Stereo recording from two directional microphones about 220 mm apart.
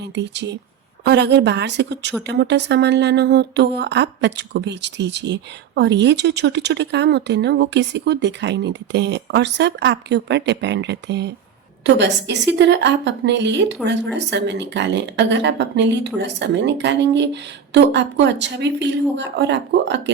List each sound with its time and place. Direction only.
0.2 s speech: 50° right (ahead or behind)